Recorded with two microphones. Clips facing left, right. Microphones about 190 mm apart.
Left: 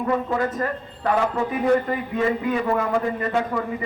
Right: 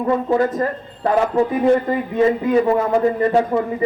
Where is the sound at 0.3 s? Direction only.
30° right (ahead or behind).